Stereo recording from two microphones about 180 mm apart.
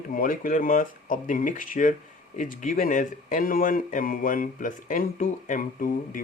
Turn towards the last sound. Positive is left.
turn(degrees=50)  # may be behind; listen again after turning